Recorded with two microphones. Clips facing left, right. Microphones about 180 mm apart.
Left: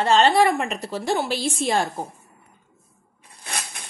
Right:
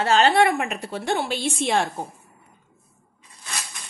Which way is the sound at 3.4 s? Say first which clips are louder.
Left 3 dB; 60° left (ahead or behind).